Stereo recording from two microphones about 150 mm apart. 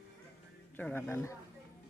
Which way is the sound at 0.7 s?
10° left (ahead or behind).